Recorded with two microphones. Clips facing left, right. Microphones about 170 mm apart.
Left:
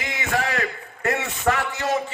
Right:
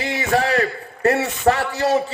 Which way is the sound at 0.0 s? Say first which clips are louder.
Right 6 dB; 35° right (ahead or behind).